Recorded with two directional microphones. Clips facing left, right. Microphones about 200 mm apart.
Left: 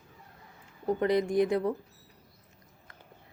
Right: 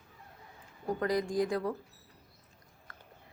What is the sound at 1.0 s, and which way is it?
Speech, 25° left (ahead or behind).